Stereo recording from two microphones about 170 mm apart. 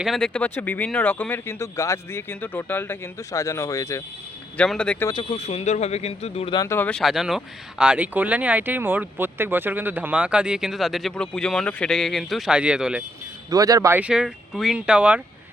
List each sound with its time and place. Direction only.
0.0 s speech: centre (ahead or behind); by 4.0 s 20° left (ahead or behind)
4.5 s speech: 5° left (ahead or behind)
5.0 s speech: 25° left (ahead or behind)
5.4 s speech: 40° left (ahead or behind)
6.6 s speech: 15° left (ahead or behind); by 13.0 s 5° right (ahead or behind)
13.5 s speech: 20° right (ahead or behind)